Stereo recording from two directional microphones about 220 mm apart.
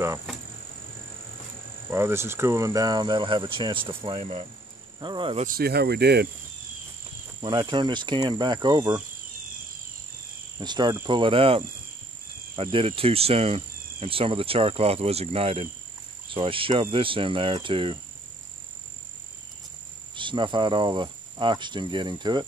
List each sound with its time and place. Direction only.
1.9 s cricket: 10° right (ahead or behind)
5.5 s speech: 45° right (ahead or behind)
7.4 s cricket: 20° right (ahead or behind)
10.6 s cricket: 20° right (ahead or behind)
12.7 s cricket: 25° right (ahead or behind)
20.2 s cricket: 20° right (ahead or behind)